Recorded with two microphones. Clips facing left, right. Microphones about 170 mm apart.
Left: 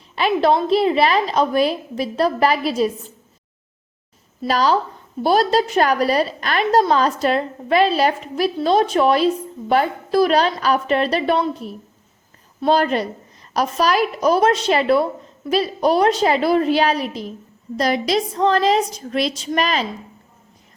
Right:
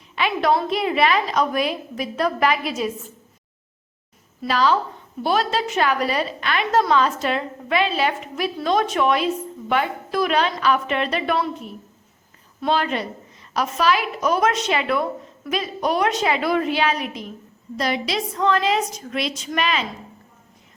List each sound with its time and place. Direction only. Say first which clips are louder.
0.2 s a woman's voice: left 4 dB; 35° left (ahead or behind)
4.4 s a woman's voice: left 2 dB; 40° left (ahead or behind)